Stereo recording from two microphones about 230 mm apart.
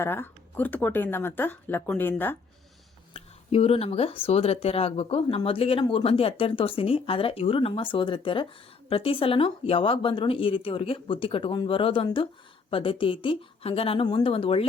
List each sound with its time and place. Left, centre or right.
0.0 s speech: centre
3.1 s speech: left